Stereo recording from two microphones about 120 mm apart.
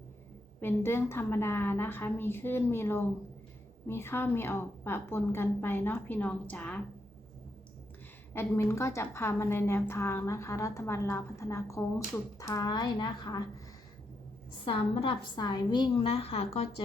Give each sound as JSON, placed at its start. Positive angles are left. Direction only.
{"t": 0.6, "sound": "a woman's voice", "side_deg": 20}
{"t": 8.3, "sound": "a woman's voice", "side_deg": 20}
{"t": 14.6, "sound": "a woman's voice", "side_deg": 45}
{"t": 16.0, "sound": "a woman's voice", "side_deg": 50}